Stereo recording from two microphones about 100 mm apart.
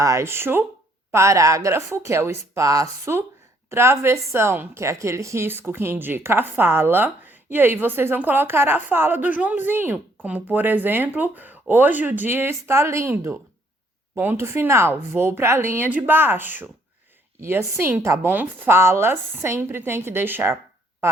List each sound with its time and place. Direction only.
0.0 s a woman's voice: 30° right (ahead or behind)